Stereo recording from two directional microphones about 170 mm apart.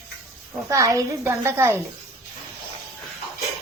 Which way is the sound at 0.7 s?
20° right (ahead or behind).